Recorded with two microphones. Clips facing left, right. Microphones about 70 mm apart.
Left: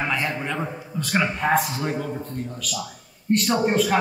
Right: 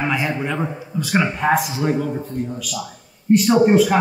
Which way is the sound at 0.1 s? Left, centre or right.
Centre.